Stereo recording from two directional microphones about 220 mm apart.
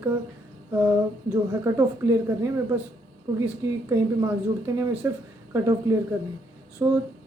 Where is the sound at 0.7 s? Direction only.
10° right (ahead or behind).